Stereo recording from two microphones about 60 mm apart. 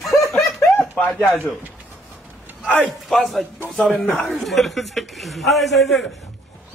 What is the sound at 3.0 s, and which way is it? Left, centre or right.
A man's voice, centre.